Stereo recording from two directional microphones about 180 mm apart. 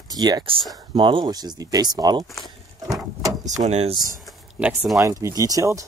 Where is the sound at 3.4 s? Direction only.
40° right (ahead or behind).